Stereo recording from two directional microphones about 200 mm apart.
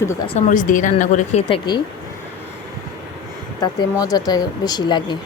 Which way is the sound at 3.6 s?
20° left (ahead or behind).